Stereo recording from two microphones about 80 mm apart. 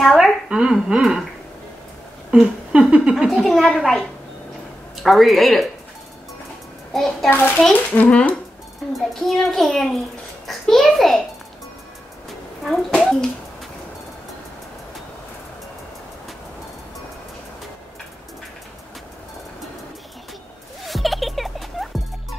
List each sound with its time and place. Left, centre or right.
0.0 s a sound: centre
0.5 s speech: centre
2.3 s a child's voice: centre
6.9 s a child's voice: centre
7.2 s a child's voice: left
8.9 s a child's voice: centre
20.8 s music: centre